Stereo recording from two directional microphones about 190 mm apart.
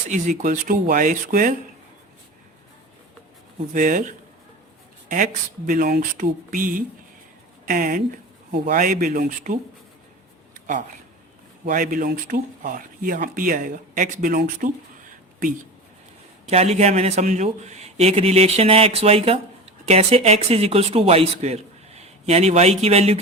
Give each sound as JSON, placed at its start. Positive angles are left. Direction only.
{"t": 0.1, "sound": "speech", "side_deg": -40}
{"t": 3.7, "sound": "speech", "side_deg": -45}
{"t": 11.6, "sound": "speech", "side_deg": -45}
{"t": 16.5, "sound": "speech", "side_deg": -35}